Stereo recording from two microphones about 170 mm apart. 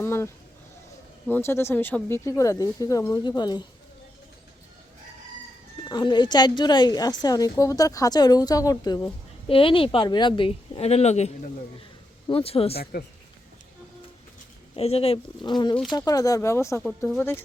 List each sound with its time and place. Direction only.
0.0 s a sound: 15° left (ahead or behind)
1.3 s speech: 15° left (ahead or behind)
5.9 s a woman's voice: 25° left (ahead or behind)
12.3 s speech: 35° left (ahead or behind)
12.7 s speech: 65° left (ahead or behind)
14.8 s speech: 35° left (ahead or behind)
15.7 s speech: centre (ahead or behind)
16.0 s a woman's voice: 20° left (ahead or behind)